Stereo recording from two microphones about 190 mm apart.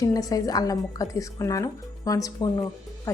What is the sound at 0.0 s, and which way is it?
A woman's voice, 20° left (ahead or behind).